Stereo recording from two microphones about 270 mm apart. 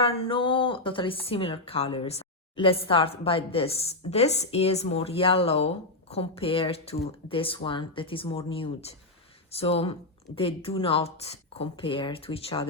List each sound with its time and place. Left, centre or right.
0.0 s speech: left